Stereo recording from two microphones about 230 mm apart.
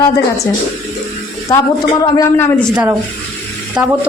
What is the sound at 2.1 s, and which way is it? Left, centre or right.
Speech, centre.